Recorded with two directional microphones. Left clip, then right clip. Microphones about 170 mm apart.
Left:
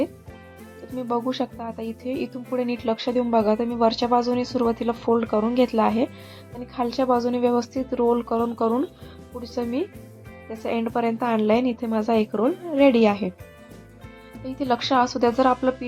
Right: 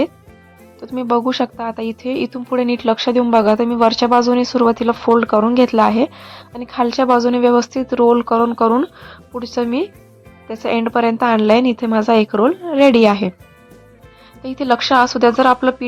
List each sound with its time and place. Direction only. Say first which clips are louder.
0.8 s a woman's voice: right 9 dB; 20° right (ahead or behind)
14.4 s speech: right 8 dB; 20° right (ahead or behind)